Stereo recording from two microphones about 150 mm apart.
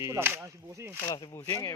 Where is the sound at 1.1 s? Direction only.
30° left (ahead or behind).